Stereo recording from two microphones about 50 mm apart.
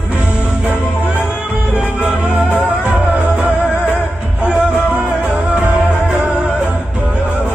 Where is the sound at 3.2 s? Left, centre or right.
Right.